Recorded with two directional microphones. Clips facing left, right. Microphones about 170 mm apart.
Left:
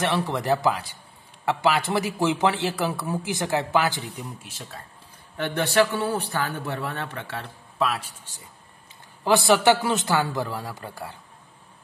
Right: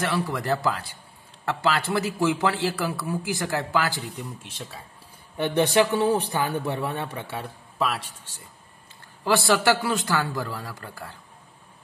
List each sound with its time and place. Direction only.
0.0 s a man's voice: 20° left (ahead or behind)
4.4 s speech: 5° left (ahead or behind)
5.4 s a man's voice: 15° right (ahead or behind); by 8.0 s centre (ahead or behind)
9.2 s a man's voice: 20° left (ahead or behind)